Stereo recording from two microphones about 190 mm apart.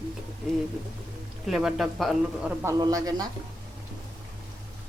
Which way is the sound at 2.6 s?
15° right (ahead or behind).